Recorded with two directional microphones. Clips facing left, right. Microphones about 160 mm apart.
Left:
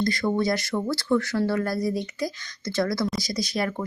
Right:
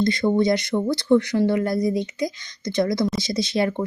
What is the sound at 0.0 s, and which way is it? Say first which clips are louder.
Speech: right 5 dB; 20° right (ahead or behind).